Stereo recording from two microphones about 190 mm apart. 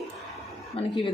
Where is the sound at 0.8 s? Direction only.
30° left (ahead or behind).